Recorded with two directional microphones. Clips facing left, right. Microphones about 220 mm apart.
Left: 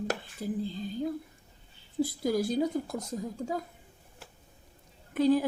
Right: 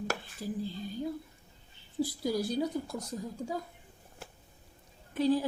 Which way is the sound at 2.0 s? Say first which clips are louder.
Left 3 dB; 50° left (ahead or behind).